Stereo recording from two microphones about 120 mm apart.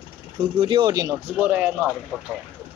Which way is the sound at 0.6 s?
40° right (ahead or behind).